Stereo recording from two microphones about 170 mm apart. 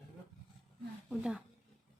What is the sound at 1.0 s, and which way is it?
Speech, 5° right (ahead or behind).